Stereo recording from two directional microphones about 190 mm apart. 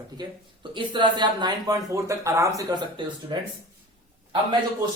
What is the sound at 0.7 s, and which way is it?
Speech, 25° right (ahead or behind).